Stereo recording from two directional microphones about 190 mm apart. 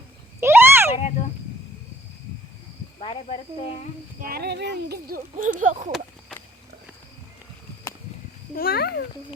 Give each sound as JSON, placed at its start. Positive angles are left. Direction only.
{"t": 0.3, "sound": "a sound", "side_deg": -10}
{"t": 0.9, "sound": "speech", "side_deg": 35}
{"t": 3.0, "sound": "speech", "side_deg": 30}
{"t": 4.2, "sound": "speech", "side_deg": -55}
{"t": 8.5, "sound": "a child's voice", "side_deg": 55}